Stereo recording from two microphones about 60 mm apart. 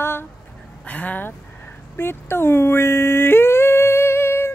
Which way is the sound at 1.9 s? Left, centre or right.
Left.